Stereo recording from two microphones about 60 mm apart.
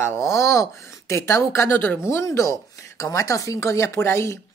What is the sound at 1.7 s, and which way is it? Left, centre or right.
Speech, left.